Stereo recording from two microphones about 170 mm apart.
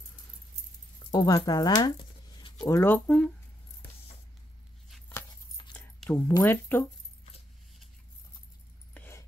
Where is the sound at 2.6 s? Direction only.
15° left (ahead or behind).